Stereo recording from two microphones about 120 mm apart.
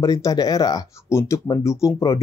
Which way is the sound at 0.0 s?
30° left (ahead or behind).